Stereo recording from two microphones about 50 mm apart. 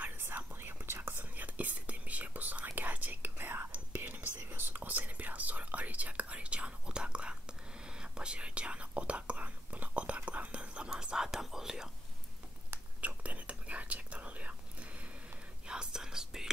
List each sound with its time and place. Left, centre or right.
0.3 s whispering: right
1.3 s whispering: right; by 11.9 s centre
13.0 s whispering: right
15.6 s whispering: centre